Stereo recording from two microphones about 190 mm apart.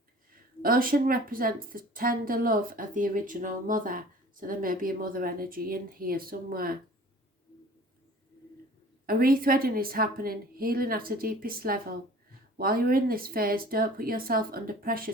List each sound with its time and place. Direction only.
0.6 s a woman's voice: 50° right (ahead or behind)
9.0 s a woman's voice: 50° right (ahead or behind)